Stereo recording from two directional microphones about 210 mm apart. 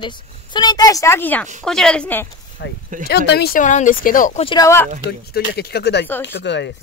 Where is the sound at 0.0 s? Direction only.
20° left (ahead or behind).